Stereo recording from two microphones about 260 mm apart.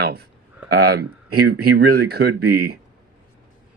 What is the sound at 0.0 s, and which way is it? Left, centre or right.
Speech, right.